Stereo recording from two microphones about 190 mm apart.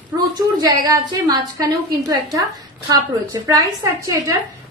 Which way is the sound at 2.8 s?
20° right (ahead or behind).